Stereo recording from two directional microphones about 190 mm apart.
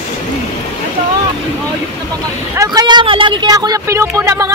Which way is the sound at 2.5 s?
20° right (ahead or behind).